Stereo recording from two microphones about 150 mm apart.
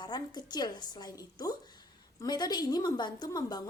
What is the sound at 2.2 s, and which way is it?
Speech, 25° left (ahead or behind).